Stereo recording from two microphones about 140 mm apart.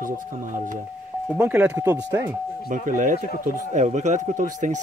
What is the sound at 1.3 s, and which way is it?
Speech, 10° right (ahead or behind).